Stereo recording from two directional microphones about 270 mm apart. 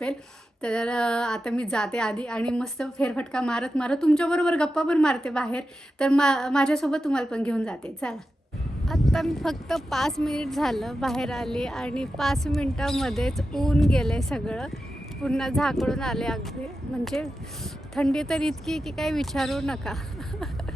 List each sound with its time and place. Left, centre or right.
0.6 s a woman's voice: centre